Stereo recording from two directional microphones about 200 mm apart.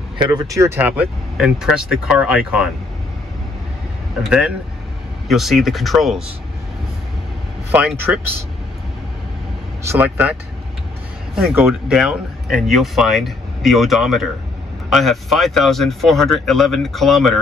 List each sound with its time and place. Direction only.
0.2 s speech: 20° right (ahead or behind)
4.2 s speech: 5° right (ahead or behind)
8.1 s speech: 10° right (ahead or behind)
9.8 s speech: 10° right (ahead or behind)
11.3 s speech: 5° right (ahead or behind)